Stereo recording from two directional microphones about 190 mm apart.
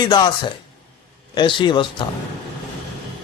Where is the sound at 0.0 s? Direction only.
25° left (ahead or behind).